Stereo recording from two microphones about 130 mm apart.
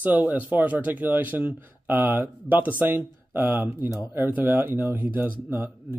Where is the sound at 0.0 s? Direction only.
10° right (ahead or behind).